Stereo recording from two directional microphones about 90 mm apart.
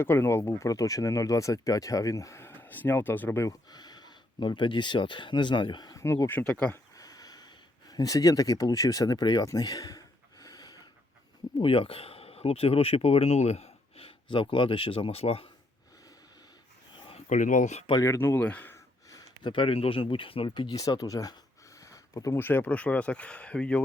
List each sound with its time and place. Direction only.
0.0 s speech: 25° left (ahead or behind)
3.4 s speech: 45° left (ahead or behind); by 5.9 s 60° left (ahead or behind)
5.9 s speech: 35° left (ahead or behind)
6.4 s speech: 15° left (ahead or behind)
6.9 s speech: 45° left (ahead or behind)
10.4 s snort: 45° left (ahead or behind)
11.6 s speech: 85° left
13.9 s speech: 80° left
16.9 s a sound: 60° left (ahead or behind)
17.9 s speech: 35° left (ahead or behind)
18.4 s speech: 20° left (ahead or behind)
19.4 s speech: 60° left (ahead or behind); by 23.8 s 15° left (ahead or behind)